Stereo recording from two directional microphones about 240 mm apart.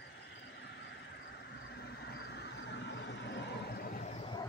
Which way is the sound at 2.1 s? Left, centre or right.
Left.